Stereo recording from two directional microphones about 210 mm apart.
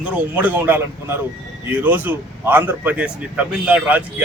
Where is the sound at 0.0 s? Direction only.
5° right (ahead or behind).